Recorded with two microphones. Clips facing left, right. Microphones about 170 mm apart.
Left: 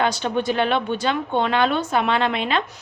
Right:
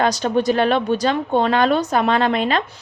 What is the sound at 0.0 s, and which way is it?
A woman's voice, 40° right (ahead or behind).